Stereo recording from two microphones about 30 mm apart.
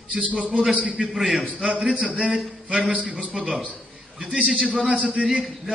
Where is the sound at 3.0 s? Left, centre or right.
Right.